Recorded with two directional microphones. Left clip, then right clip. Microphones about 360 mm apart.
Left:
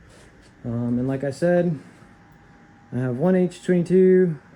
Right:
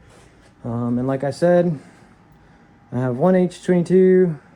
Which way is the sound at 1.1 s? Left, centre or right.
Centre.